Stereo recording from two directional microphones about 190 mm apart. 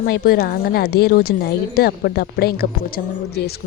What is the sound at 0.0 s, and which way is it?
A woman's voice, 50° left (ahead or behind).